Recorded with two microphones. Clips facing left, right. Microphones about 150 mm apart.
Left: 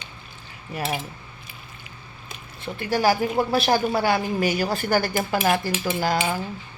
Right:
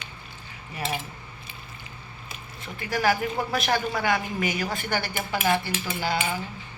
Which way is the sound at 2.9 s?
35° left (ahead or behind).